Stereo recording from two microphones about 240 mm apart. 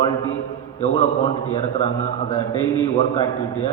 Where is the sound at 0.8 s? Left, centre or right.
Left.